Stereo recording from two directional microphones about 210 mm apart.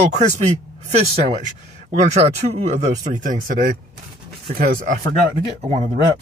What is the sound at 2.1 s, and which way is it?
Speech, 30° right (ahead or behind).